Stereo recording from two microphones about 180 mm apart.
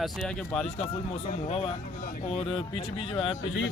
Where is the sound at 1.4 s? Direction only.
35° left (ahead or behind).